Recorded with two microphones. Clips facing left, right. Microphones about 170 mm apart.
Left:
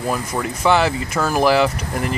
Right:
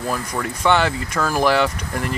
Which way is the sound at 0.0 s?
10° left (ahead or behind).